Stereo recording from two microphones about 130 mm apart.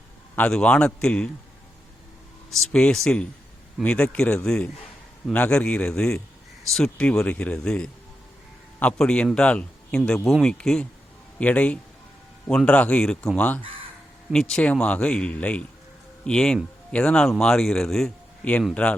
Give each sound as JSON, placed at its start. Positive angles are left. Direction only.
{"t": 0.3, "sound": "a man's voice", "side_deg": 10}
{"t": 2.5, "sound": "a man's voice", "side_deg": 5}